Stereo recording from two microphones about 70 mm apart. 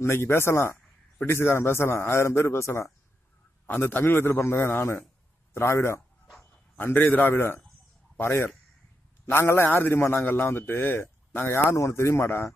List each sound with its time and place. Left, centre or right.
0.0 s a man's voice: left
3.6 s a man's voice: left
6.8 s a man's voice: left